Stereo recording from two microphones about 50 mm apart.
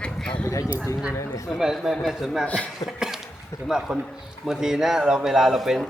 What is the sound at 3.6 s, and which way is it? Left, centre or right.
A man's voice, centre.